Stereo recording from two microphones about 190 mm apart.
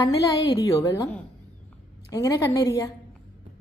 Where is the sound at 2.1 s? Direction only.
15° left (ahead or behind).